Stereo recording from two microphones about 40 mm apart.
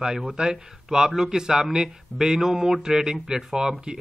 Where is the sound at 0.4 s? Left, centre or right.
Centre.